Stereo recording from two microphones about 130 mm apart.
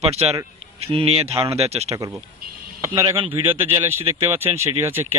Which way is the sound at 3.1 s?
45° right (ahead or behind).